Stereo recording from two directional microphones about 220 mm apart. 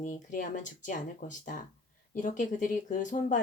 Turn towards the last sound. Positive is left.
turn(degrees=35)  # may be behind; listen again after turning